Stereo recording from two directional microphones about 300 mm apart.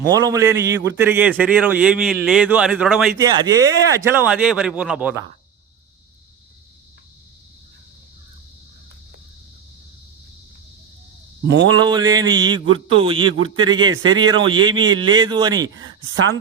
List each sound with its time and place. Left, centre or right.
0.1 s a man's voice: centre
11.4 s a man's voice: right
11.8 s a sound: centre